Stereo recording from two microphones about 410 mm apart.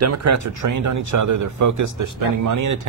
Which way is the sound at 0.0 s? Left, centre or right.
Right.